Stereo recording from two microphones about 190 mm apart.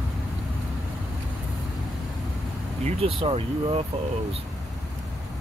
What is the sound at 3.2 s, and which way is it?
Speech, 30° right (ahead or behind).